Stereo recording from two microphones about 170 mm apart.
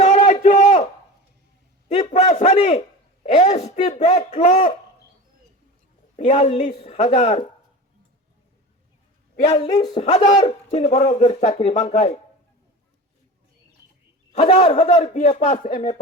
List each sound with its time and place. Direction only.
0.0 s a sound: 40° left (ahead or behind)
1.9 s a sound: 40° left (ahead or behind)
6.1 s speech: 40° left (ahead or behind)
9.7 s speech: 25° left (ahead or behind)
10.0 s speech: 40° left (ahead or behind)
14.3 s speech: 40° left (ahead or behind)